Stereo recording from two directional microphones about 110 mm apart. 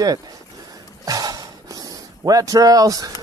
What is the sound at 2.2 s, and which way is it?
Speech, 35° right (ahead or behind).